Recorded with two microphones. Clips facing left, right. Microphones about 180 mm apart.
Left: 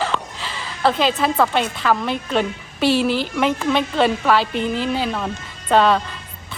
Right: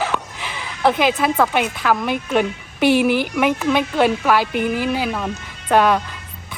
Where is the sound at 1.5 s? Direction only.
10° right (ahead or behind).